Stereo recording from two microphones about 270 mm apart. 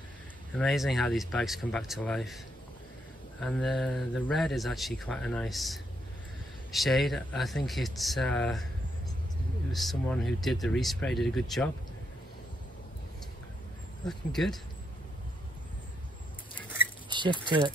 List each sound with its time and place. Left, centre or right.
0.6 s a man's voice: centre
9.7 s a man's voice: centre
14.0 s a man's voice: centre
17.1 s speech: centre